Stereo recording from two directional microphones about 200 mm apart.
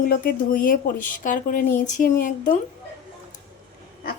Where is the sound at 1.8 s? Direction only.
40° left (ahead or behind).